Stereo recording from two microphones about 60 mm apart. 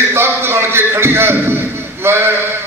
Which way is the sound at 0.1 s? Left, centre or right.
Right.